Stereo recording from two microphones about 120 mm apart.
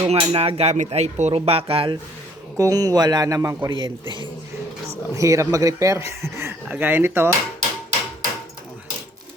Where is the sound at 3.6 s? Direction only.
45° right (ahead or behind).